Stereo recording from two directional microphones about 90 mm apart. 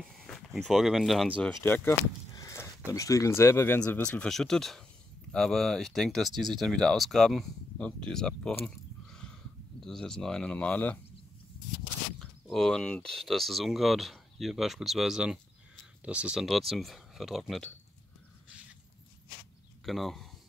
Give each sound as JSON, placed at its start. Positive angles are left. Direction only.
{"t": 0.1, "sound": "speech", "side_deg": 5}
{"t": 1.6, "sound": "speech", "side_deg": 25}
{"t": 2.3, "sound": "a sound", "side_deg": 35}
{"t": 2.9, "sound": "speech", "side_deg": 40}
{"t": 8.6, "sound": "a sound", "side_deg": 10}
{"t": 12.2, "sound": "speech", "side_deg": 5}
{"t": 16.4, "sound": "speech", "side_deg": 0}
{"t": 19.8, "sound": "speech", "side_deg": 0}